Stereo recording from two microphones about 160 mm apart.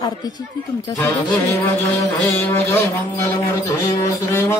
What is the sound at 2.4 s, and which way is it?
Music, 15° left (ahead or behind).